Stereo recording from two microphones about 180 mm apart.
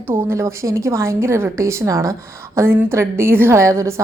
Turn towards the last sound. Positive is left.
turn(degrees=-15)  # may be behind; listen again after turning